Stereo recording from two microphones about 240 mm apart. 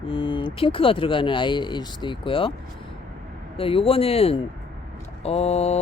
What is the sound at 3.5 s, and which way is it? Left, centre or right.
Speech, left.